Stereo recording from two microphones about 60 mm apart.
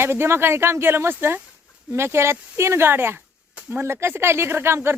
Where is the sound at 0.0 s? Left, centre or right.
Right.